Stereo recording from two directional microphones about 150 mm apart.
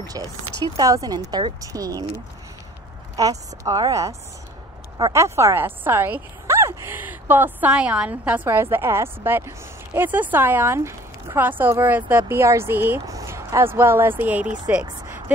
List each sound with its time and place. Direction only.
0.7 s a woman's voice: 25° right (ahead or behind)
3.2 s a woman's voice: 25° right (ahead or behind)
5.1 s speech: 20° right (ahead or behind)